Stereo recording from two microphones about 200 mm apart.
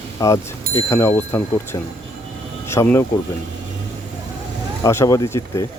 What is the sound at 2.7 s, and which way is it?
Speech, 15° left (ahead or behind).